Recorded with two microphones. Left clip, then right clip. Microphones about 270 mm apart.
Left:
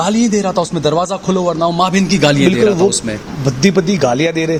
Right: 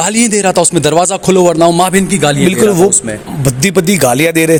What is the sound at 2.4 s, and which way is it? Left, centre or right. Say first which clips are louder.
Speech: right 2 dB; right.